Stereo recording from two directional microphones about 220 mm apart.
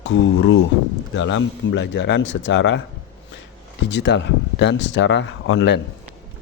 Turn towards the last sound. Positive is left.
turn(degrees=55)  # may be behind; listen again after turning